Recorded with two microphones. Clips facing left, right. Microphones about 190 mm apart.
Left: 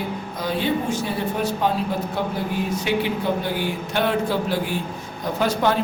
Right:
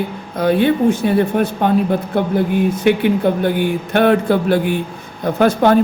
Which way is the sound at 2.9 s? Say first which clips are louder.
Right 9 dB; 55° right (ahead or behind).